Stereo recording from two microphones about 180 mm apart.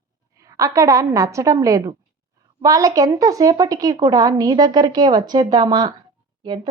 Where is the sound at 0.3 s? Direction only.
20° right (ahead or behind).